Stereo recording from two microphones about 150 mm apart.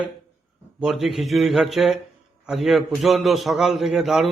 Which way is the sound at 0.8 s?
Centre (ahead or behind).